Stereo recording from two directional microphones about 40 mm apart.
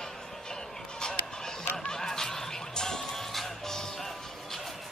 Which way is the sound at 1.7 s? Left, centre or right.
Centre.